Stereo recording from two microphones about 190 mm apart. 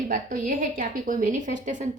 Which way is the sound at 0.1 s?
45° right (ahead or behind).